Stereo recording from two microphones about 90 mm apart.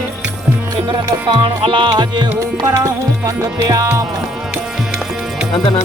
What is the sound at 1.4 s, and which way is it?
Music, 65° right (ahead or behind).